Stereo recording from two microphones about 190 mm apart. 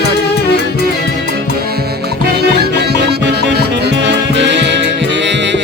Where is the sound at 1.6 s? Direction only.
55° right (ahead or behind).